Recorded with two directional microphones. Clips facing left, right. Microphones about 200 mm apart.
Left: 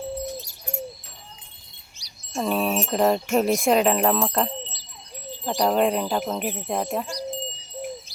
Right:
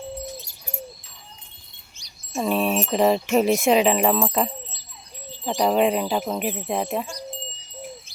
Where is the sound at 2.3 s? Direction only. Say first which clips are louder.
Right 1 dB; centre (ahead or behind).